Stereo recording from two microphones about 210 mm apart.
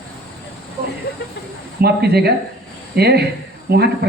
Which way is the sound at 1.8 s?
50° right (ahead or behind).